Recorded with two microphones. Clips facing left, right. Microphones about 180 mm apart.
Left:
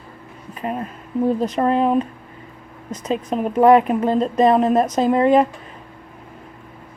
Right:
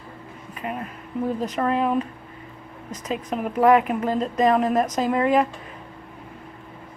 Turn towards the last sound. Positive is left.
turn(degrees=30)  # may be behind; listen again after turning